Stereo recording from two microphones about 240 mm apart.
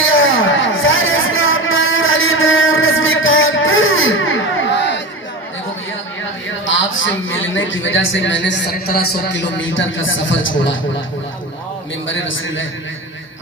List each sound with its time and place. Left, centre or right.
0.0 s a sound: left
6.7 s a man's voice: left
12.0 s a man's voice: left